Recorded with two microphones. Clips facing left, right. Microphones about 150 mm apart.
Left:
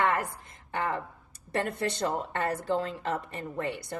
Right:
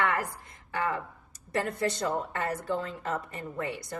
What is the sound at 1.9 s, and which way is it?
A woman's voice, 30° left (ahead or behind).